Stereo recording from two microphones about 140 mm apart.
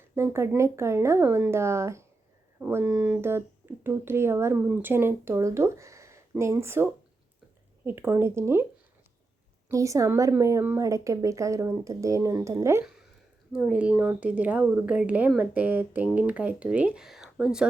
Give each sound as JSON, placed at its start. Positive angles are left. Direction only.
{"t": 0.2, "sound": "speech", "side_deg": -20}
{"t": 9.6, "sound": "speech", "side_deg": -20}
{"t": 13.5, "sound": "speech", "side_deg": -10}